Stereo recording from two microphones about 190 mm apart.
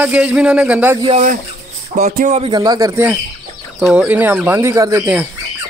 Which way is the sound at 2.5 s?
20° right (ahead or behind).